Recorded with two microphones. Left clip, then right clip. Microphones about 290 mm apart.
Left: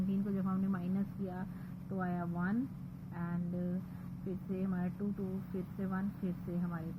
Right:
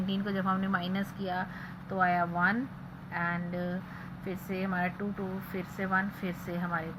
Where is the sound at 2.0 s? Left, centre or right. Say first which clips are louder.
Right 14 dB; centre.